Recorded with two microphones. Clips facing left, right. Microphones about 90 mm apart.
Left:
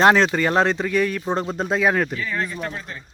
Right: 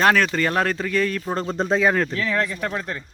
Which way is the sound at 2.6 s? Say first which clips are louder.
Right 4 dB; 70° right (ahead or behind).